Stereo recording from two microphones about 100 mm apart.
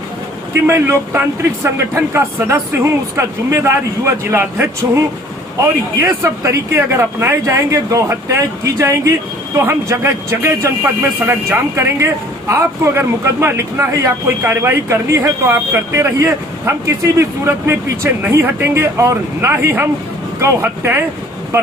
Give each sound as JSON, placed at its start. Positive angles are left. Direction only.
{"t": 0.7, "sound": "speech", "side_deg": -25}